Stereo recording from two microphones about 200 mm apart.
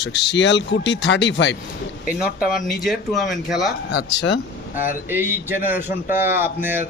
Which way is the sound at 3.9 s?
60° left (ahead or behind).